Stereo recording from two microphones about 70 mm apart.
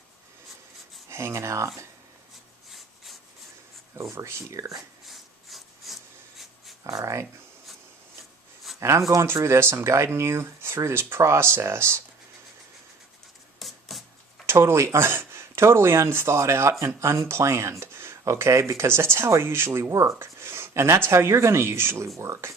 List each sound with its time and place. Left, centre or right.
1.1 s speech: right
2.6 s rub: centre
3.9 s speech: right
5.0 s wood: centre
6.8 s speech: right
8.8 s speech: right
13.6 s a sound: centre
14.4 s speech: right